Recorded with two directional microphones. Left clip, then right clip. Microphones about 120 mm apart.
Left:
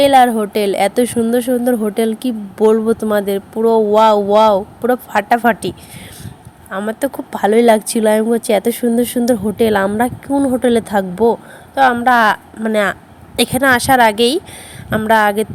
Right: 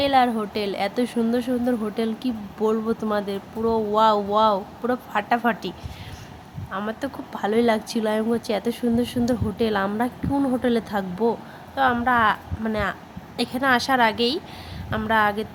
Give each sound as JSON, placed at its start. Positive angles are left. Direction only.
{"t": 0.0, "sound": "a woman's voice", "side_deg": 55}